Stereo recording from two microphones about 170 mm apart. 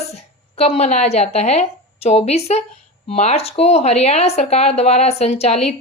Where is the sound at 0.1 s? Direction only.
40° left (ahead or behind).